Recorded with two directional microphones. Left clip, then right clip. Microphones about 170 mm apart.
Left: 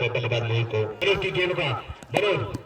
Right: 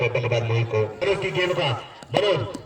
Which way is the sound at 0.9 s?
35° right (ahead or behind).